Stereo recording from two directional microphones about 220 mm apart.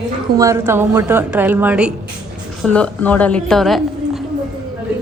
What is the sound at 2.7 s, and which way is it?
A woman's voice, 5° left (ahead or behind).